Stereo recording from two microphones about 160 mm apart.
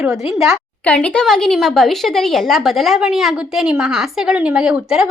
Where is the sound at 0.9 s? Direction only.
5° left (ahead or behind).